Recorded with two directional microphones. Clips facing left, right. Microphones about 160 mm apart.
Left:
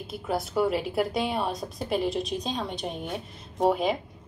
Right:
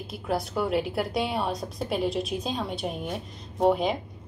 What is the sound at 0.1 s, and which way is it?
A woman's voice, centre (ahead or behind).